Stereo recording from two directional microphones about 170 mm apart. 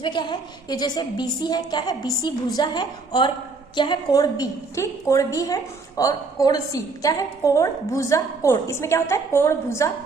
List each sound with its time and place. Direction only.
0.0 s a woman's voice: 25° left (ahead or behind)